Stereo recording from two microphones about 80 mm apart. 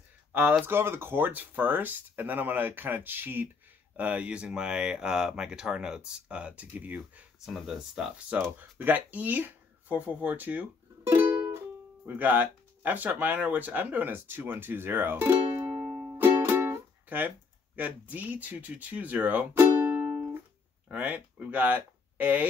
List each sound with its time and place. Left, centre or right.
0.3 s speech: right
7.3 s speech: centre
8.5 s speech: right
15.4 s music: right
17.7 s speech: right
19.5 s music: right
20.9 s speech: centre